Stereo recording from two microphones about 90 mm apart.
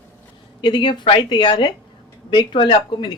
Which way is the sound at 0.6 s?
60° left (ahead or behind).